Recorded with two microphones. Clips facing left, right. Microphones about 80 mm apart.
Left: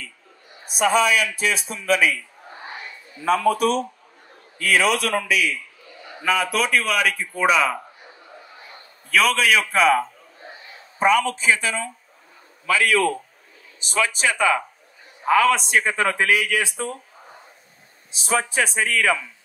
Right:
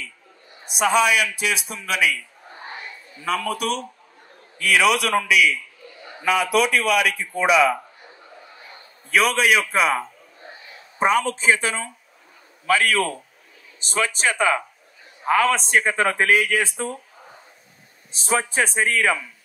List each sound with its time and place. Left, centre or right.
0.7 s speech: left
3.3 s speech: left
9.1 s a man's voice: right
11.0 s a man's voice: right
18.2 s a man's voice: left
18.6 s a man's voice: right